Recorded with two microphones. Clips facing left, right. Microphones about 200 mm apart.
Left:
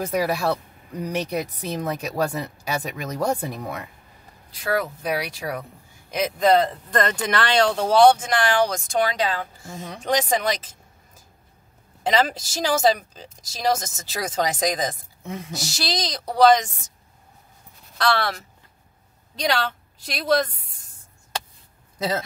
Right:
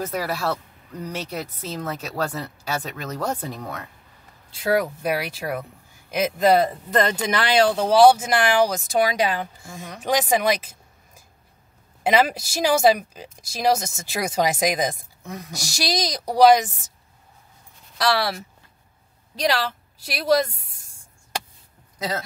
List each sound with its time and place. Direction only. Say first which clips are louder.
0.0 s speech: left 3 dB; 15° left (ahead or behind)
4.5 s speech: right 3 dB; 20° right (ahead or behind)
12.0 s speech: right 2 dB; 10° right (ahead or behind)
15.2 s speech: left 2 dB; 25° left (ahead or behind)
15.5 s speech: right 3 dB; 15° right (ahead or behind)
17.9 s a woman's voice: right 1 dB; 10° right (ahead or behind)
21.9 s a sound: left 3 dB; 25° left (ahead or behind)